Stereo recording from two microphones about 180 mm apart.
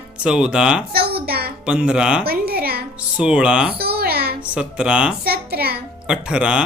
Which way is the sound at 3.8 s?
60° right (ahead or behind).